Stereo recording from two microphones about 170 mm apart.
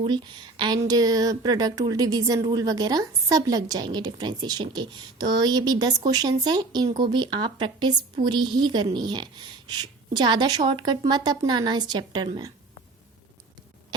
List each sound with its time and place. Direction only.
0.0 s speech: 25° right (ahead or behind)